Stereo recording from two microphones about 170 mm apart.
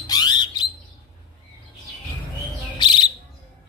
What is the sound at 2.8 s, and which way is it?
Bird, 30° left (ahead or behind).